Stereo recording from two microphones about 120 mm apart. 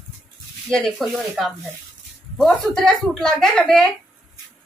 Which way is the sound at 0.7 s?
Centre (ahead or behind).